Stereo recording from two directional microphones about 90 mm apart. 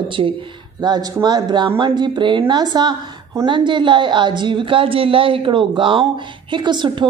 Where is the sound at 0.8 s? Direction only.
50° right (ahead or behind).